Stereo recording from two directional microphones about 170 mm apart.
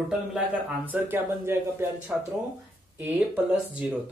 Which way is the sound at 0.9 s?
10° right (ahead or behind).